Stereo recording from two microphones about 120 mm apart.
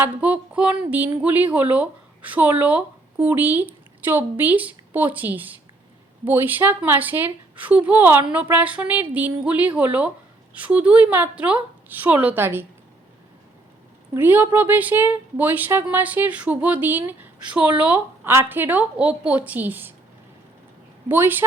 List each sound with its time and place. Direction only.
0.0 s speech: 10° right (ahead or behind)
14.1 s speech: 15° right (ahead or behind)
21.1 s speech: 15° right (ahead or behind)